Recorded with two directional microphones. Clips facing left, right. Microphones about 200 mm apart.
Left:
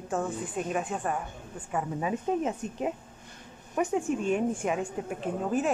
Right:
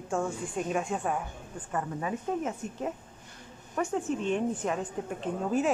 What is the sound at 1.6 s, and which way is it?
A woman's voice, 15° left (ahead or behind).